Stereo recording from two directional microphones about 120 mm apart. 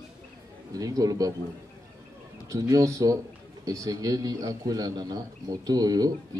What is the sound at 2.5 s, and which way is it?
A man's voice, 30° right (ahead or behind).